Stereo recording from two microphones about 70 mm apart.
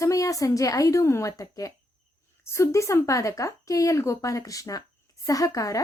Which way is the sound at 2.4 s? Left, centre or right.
Left.